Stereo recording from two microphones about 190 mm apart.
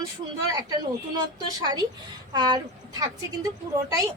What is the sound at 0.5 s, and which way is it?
Speech, 20° right (ahead or behind).